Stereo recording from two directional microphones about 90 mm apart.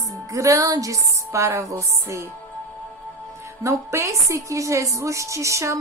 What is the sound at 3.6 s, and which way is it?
A woman's voice, 30° right (ahead or behind).